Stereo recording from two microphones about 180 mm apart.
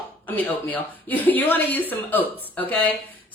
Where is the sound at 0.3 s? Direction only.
10° left (ahead or behind).